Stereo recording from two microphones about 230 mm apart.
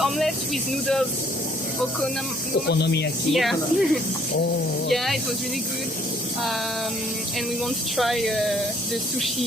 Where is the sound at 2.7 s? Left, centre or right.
Left.